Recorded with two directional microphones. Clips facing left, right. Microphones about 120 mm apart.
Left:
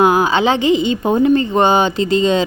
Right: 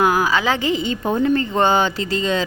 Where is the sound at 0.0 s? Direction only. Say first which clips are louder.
Left 5 dB; 25° left (ahead or behind).